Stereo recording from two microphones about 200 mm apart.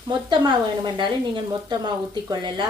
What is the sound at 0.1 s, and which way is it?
A woman's voice, 25° right (ahead or behind).